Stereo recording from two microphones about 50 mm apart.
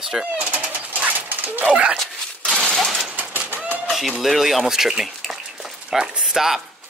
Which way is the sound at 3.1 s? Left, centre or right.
Right.